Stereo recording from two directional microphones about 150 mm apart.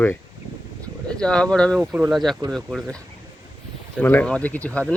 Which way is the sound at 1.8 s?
5° right (ahead or behind).